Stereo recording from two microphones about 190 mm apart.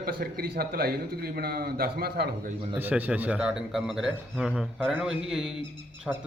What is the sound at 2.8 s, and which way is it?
A man's voice, 10° right (ahead or behind).